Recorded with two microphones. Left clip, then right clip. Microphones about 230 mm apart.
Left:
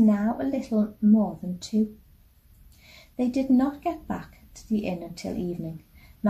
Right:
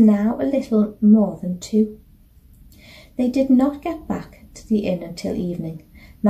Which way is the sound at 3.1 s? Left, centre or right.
Centre.